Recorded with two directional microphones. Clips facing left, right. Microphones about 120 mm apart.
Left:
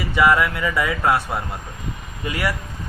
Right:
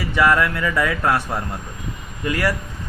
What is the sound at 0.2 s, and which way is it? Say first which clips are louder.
A man's voice: even; 10° left (ahead or behind).